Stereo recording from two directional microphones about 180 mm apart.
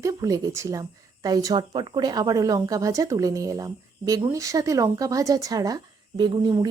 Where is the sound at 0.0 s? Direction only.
20° right (ahead or behind).